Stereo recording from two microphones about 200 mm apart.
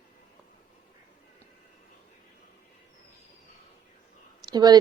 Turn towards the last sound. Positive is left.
turn(degrees=-20)  # may be behind; listen again after turning